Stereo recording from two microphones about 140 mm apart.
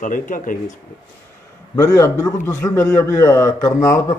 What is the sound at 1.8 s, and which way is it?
Speech, 20° left (ahead or behind).